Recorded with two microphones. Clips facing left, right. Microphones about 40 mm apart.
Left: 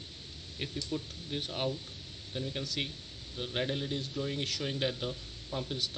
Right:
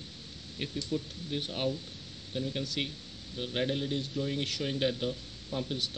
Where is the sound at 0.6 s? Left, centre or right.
Centre.